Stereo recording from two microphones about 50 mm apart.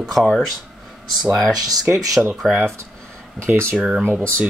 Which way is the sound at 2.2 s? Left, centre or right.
Right.